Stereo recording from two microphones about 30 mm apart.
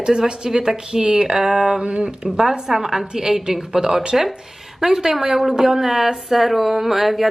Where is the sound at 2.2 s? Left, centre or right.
Right.